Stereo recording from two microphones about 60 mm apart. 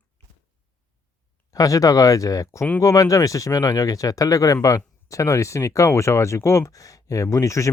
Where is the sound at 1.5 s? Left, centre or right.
Left.